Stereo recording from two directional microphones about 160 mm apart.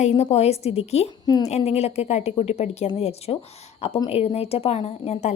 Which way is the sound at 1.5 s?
45° left (ahead or behind).